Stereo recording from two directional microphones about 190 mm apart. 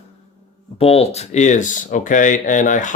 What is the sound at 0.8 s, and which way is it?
Speech, 30° left (ahead or behind).